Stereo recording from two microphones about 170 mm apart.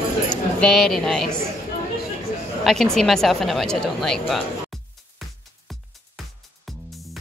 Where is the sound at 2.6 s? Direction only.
5° left (ahead or behind).